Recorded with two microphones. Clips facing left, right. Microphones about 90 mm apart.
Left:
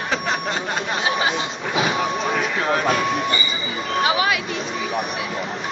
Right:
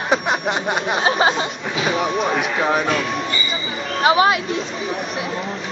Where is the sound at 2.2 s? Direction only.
15° right (ahead or behind).